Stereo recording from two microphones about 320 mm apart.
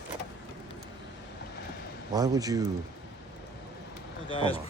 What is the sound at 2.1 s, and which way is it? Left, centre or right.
Speech, centre.